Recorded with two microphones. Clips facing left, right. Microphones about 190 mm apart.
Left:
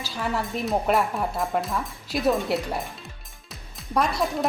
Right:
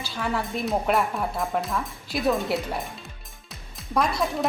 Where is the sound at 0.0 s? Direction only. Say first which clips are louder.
Even; 5° left (ahead or behind).